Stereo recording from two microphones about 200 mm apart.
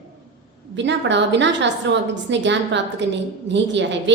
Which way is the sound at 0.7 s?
65° right (ahead or behind).